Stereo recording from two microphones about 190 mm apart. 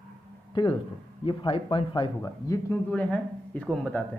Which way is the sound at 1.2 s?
25° left (ahead or behind).